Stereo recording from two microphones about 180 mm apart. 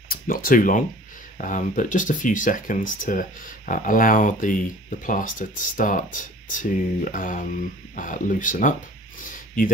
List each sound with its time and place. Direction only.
0.1 s speech: 50° left (ahead or behind)